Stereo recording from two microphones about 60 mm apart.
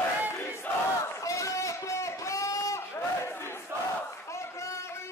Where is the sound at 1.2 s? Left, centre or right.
Left.